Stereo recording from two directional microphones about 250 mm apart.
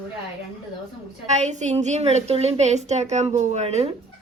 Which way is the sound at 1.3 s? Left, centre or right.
Right.